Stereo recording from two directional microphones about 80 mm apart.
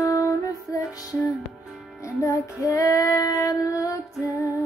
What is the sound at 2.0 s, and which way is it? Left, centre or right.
Child singing, left.